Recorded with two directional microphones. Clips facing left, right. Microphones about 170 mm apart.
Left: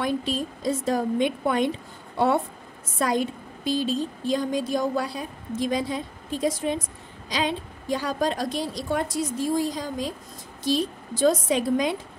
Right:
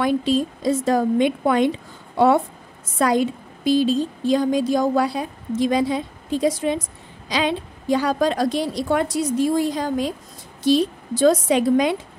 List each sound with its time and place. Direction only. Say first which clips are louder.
0.0 s a woman's voice: right 7 dB; 90° right; by 10.1 s 70° right (ahead or behind)
10.6 s a woman's voice: right 7 dB; 80° right